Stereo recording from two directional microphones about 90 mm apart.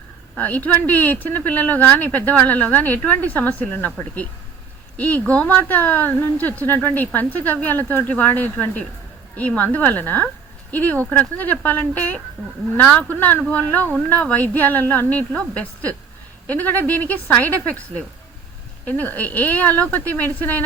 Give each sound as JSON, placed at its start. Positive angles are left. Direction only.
{"t": 0.3, "sound": "a woman's voice", "side_deg": 20}